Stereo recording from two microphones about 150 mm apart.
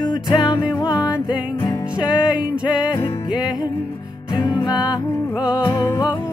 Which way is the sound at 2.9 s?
30° left (ahead or behind).